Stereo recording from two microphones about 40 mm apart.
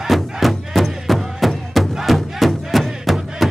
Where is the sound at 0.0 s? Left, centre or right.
Centre.